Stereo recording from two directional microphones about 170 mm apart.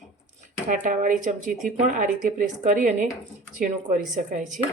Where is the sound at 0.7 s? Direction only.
55° right (ahead or behind).